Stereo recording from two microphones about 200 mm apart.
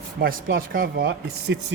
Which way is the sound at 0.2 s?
45° right (ahead or behind).